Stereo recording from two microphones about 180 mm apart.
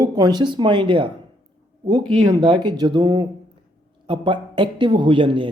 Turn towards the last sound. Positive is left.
turn(degrees=-30)  # may be behind; listen again after turning